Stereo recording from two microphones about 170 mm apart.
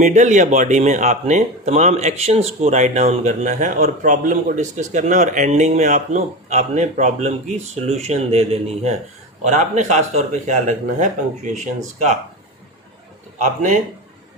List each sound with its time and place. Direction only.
0.0 s speech: 45° right (ahead or behind)
13.4 s speech: 50° right (ahead or behind)